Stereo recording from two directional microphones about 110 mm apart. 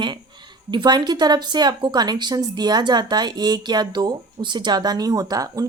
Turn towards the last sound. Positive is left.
turn(degrees=-35)  # may be behind; listen again after turning